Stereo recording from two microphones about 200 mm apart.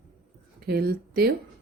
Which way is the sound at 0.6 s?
50° right (ahead or behind).